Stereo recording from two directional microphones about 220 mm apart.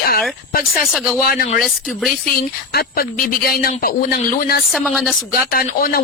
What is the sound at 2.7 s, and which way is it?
Speech, 45° left (ahead or behind).